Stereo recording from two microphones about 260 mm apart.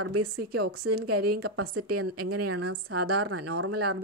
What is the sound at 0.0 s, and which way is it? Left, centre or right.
A woman's voice, right.